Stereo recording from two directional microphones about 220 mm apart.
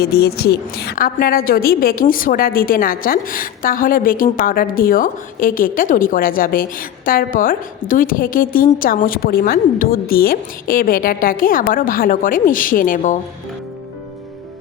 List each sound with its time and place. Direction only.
0.0 s a woman's voice: 45° left (ahead or behind)